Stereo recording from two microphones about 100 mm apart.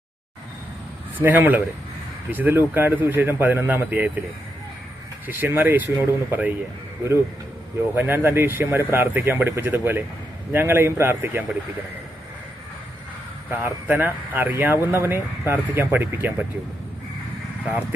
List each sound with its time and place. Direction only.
1.2 s speech: 20° right (ahead or behind)
5.2 s speech: 20° right (ahead or behind)
7.9 s speech: 20° right (ahead or behind)
13.5 s speech: 20° right (ahead or behind)